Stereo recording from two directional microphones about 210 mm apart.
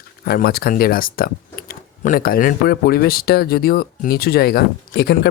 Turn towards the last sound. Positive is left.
turn(degrees=50)  # may be behind; listen again after turning